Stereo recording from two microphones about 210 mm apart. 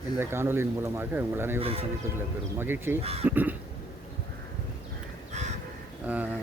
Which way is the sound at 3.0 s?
30° right (ahead or behind).